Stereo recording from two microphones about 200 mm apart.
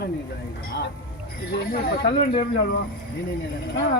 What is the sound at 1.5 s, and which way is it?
Speech, 50° left (ahead or behind).